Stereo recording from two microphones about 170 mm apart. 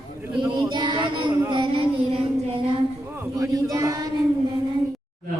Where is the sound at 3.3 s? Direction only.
20° right (ahead or behind).